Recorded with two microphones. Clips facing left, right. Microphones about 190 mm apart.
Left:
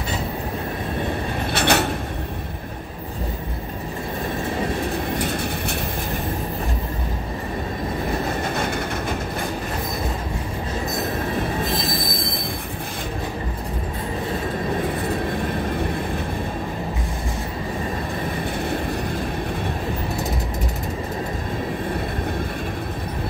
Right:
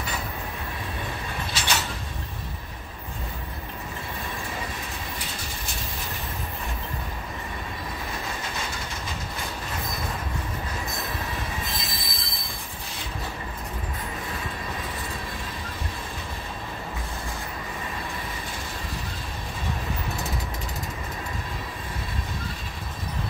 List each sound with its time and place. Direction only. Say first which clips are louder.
1.5 s train: left 11 dB; 60° left (ahead or behind)
5.2 s train: left 12 dB; 60° left (ahead or behind)
8.3 s train: left 9 dB; 60° left (ahead or behind)
11.7 s train wheels squealing: left 11 dB; 55° left (ahead or behind)
15.0 s train: left 12 dB; 60° left (ahead or behind)